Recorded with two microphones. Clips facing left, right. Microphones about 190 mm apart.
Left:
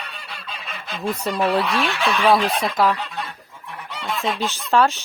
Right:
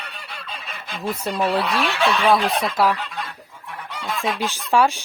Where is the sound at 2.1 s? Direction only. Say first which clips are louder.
Left 1 dB; 5° right (ahead or behind).